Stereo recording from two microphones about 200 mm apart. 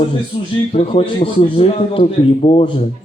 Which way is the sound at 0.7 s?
30° left (ahead or behind).